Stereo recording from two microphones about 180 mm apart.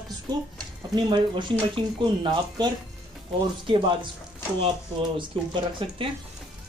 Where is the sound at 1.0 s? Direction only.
25° right (ahead or behind).